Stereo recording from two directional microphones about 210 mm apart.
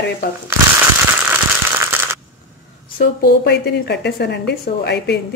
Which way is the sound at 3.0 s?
50° left (ahead or behind).